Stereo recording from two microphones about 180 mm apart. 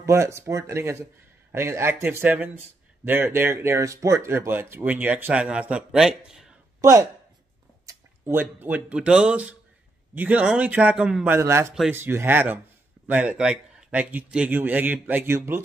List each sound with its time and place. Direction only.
0.0 s speech: 15° right (ahead or behind)
6.8 s speech: 15° right (ahead or behind)
11.3 s speech: 15° right (ahead or behind)
11.7 s speech: centre (ahead or behind)
12.0 s speech: 15° right (ahead or behind)